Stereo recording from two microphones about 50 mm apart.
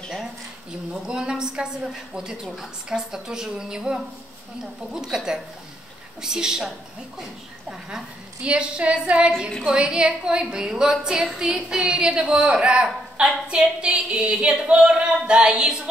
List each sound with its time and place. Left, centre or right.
1.0 s a woman's voice: centre
2.4 s a woman's voice: centre
3.1 s a woman's voice: centre
8.4 s a woman's voice: right